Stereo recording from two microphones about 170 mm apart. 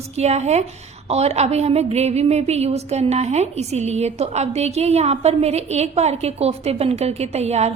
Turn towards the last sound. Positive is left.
turn(degrees=-40)  # may be behind; listen again after turning